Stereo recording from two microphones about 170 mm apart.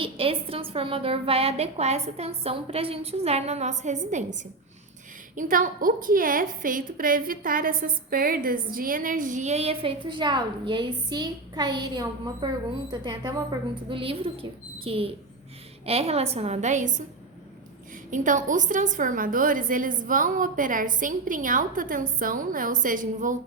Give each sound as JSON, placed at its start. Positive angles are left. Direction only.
{"t": 0.0, "sound": "a woman's voice", "side_deg": -35}
{"t": 5.3, "sound": "a woman's voice", "side_deg": -50}
{"t": 18.1, "sound": "a woman's voice", "side_deg": -50}